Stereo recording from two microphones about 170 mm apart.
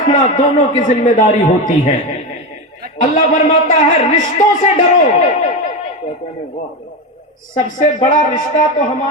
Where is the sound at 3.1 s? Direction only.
45° left (ahead or behind).